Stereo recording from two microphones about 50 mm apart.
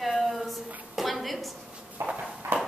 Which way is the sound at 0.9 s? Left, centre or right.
Centre.